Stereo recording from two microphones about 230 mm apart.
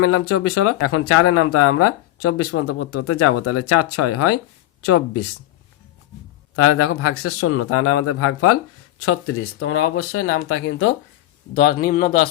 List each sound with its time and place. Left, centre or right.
0.0 s speech: left
6.6 s speech: left
9.0 s speech: left
11.5 s speech: left